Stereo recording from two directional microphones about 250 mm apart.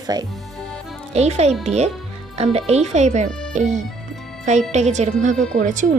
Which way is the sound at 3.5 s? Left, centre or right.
Right.